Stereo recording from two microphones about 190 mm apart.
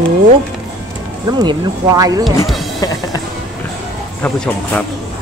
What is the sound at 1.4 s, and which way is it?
Speech, 20° right (ahead or behind).